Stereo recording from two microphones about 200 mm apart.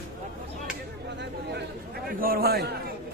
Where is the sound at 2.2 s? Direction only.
50° right (ahead or behind).